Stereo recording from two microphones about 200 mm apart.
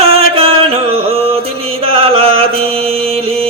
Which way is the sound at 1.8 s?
30° right (ahead or behind).